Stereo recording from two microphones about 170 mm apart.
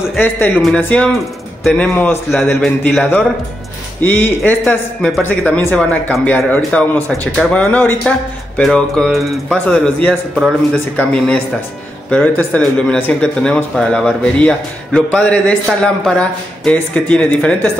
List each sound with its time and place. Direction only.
0.2 s speech: 10° left (ahead or behind)
11.0 s speech: 5° left (ahead or behind)